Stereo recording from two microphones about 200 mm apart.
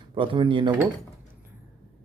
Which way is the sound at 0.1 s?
25° right (ahead or behind).